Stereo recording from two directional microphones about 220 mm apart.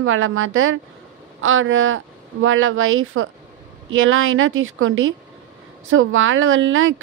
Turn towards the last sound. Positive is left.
turn(degrees=-65)  # may be behind; listen again after turning